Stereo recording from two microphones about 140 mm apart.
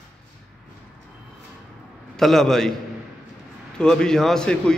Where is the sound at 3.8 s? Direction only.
5° left (ahead or behind).